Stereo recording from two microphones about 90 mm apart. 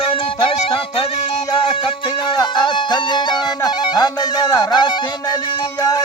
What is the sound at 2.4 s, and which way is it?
Music, 55° left (ahead or behind).